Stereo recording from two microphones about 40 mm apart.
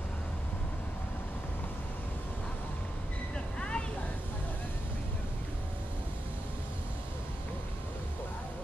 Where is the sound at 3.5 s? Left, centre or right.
Left.